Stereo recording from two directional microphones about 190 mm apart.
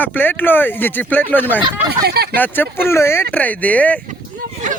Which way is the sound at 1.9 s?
55° right (ahead or behind).